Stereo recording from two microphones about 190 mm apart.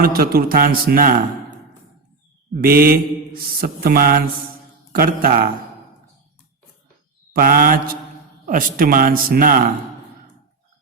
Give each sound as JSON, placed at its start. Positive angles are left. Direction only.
{"t": 0.0, "sound": "mantra", "side_deg": -50}
{"t": 2.6, "sound": "mantra", "side_deg": -50}
{"t": 7.3, "sound": "mantra", "side_deg": -50}